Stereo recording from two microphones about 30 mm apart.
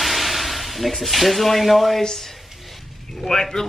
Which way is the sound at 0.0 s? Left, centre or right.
Centre.